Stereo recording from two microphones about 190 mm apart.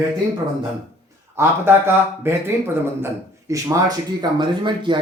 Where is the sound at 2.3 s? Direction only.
10° right (ahead or behind).